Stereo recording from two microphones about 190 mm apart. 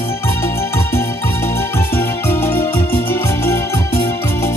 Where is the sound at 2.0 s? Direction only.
10° left (ahead or behind).